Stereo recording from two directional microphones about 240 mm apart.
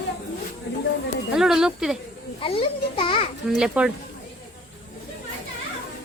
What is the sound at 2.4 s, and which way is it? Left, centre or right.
Speech, left.